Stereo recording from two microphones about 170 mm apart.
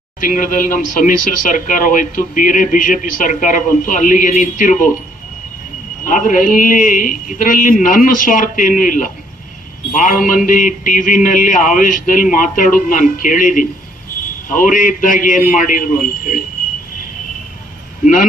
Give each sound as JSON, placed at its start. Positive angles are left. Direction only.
{"t": 0.2, "sound": "speech", "side_deg": 50}
{"t": 6.1, "sound": "speech", "side_deg": 50}
{"t": 18.0, "sound": "speech", "side_deg": 50}